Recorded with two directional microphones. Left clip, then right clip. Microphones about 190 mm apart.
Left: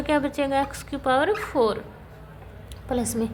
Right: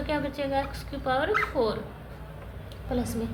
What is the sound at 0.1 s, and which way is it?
A woman's voice, 55° left (ahead or behind).